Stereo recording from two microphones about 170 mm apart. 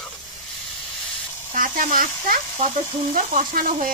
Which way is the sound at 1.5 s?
50° right (ahead or behind).